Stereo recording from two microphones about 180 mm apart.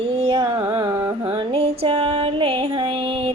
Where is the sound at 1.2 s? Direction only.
30° right (ahead or behind).